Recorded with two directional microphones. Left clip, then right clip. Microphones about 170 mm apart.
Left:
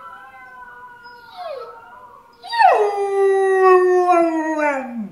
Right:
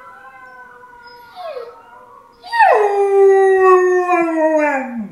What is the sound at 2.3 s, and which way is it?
Howl, 20° left (ahead or behind).